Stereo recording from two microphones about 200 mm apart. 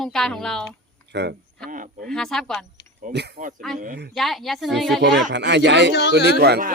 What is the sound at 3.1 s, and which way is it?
Speech, 55° right (ahead or behind).